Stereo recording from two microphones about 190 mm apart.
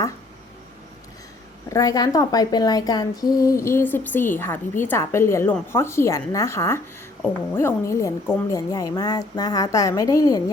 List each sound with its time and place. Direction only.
1.7 s a woman's voice: 20° left (ahead or behind)